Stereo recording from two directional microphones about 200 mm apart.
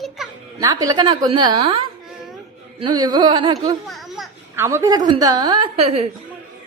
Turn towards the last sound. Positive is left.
turn(degrees=-30)  # may be behind; listen again after turning